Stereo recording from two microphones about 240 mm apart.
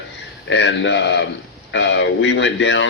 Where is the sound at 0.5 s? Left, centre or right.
Left.